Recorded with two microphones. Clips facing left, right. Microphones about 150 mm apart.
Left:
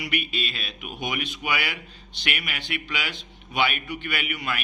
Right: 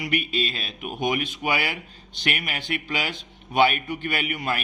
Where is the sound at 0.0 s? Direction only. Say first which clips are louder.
Right 4 dB; 40° right (ahead or behind).